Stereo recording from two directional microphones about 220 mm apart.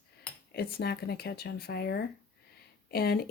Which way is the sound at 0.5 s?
45° left (ahead or behind).